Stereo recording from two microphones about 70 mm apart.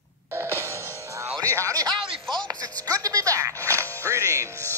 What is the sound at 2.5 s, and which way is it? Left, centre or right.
Music, right.